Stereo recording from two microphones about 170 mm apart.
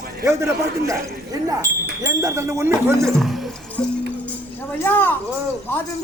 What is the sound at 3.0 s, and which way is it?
Speech, centre (ahead or behind).